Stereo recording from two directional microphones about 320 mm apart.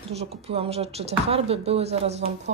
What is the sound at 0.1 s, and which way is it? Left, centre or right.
Speech, centre.